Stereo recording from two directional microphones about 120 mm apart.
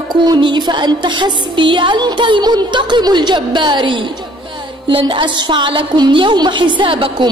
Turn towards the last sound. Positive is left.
turn(degrees=-45)  # may be behind; listen again after turning